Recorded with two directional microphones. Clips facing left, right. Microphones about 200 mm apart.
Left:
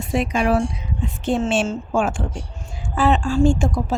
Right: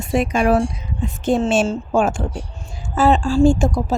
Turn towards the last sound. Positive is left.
turn(degrees=-35)  # may be behind; listen again after turning